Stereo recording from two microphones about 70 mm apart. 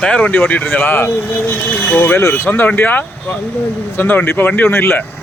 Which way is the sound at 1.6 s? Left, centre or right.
Centre.